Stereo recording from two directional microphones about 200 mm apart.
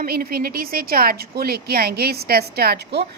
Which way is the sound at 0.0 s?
50° right (ahead or behind).